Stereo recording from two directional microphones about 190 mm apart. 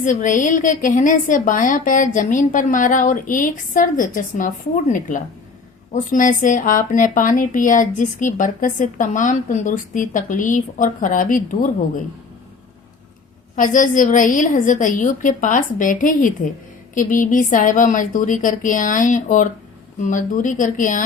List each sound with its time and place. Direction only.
0.0 s speech: 40° left (ahead or behind)
13.6 s speech: 45° left (ahead or behind)